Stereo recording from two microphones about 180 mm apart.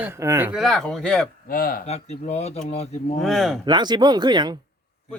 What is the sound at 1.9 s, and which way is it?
Speech, 35° left (ahead or behind).